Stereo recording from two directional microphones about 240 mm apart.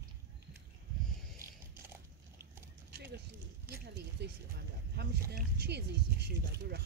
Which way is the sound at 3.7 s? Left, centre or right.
Right.